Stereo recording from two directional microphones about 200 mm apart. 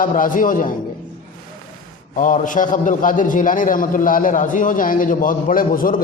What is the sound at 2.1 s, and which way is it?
A man's voice, 40° left (ahead or behind).